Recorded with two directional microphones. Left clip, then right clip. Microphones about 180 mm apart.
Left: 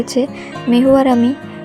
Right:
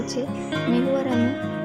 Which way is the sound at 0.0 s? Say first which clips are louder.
Left 9 dB; 45° left (ahead or behind).